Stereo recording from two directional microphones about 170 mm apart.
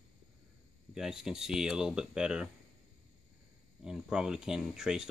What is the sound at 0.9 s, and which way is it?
Speech, centre (ahead or behind).